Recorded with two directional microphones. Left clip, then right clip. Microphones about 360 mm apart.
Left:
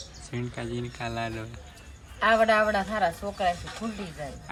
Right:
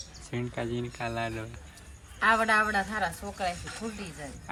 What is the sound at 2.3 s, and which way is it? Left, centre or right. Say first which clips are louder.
Speech: left 3 dB; left.